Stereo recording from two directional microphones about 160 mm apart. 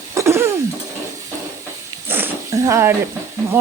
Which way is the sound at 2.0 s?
15° right (ahead or behind).